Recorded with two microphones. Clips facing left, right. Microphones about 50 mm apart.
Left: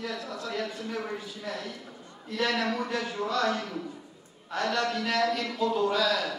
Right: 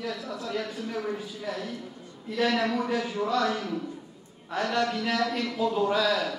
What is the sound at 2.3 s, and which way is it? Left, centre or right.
A man's voice, right.